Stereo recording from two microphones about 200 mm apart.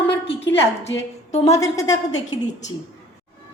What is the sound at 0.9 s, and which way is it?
Speech, 70° left (ahead or behind).